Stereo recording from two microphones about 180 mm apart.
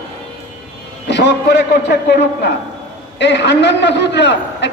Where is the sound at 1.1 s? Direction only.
75° left (ahead or behind).